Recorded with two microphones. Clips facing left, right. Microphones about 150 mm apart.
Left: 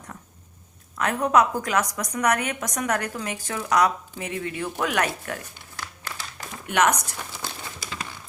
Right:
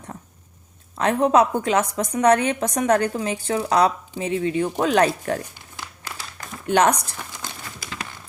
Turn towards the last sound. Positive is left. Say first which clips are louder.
# right 4 dB
turn(degrees=-30)  # may be behind; listen again after turning